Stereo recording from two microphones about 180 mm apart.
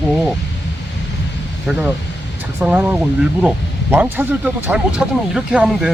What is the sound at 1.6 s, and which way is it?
Speech, 10° right (ahead or behind).